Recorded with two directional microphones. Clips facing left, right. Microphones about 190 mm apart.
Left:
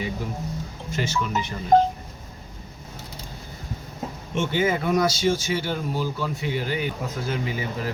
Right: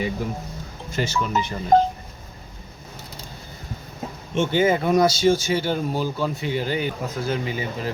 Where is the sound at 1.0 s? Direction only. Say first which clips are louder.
Right 2 dB; 35° right (ahead or behind).